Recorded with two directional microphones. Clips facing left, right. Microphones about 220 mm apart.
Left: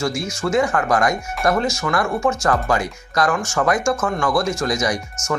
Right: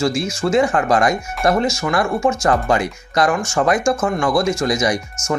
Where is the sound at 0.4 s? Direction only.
30° right (ahead or behind).